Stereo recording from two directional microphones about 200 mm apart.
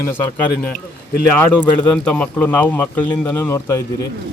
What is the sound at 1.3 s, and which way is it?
Speech, 5° left (ahead or behind).